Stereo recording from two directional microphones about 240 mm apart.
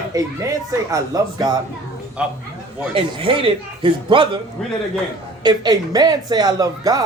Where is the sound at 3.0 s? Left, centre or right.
Right.